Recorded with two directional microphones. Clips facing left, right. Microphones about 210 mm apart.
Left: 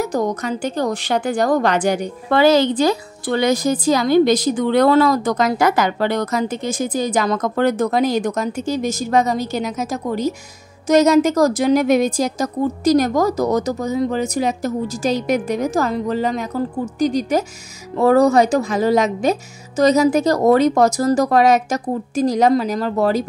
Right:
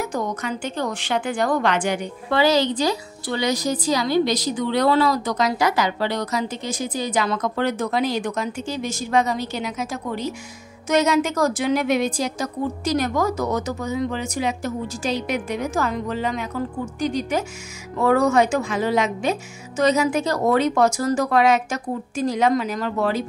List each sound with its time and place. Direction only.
0.0 s a woman's voice: 40° left (ahead or behind)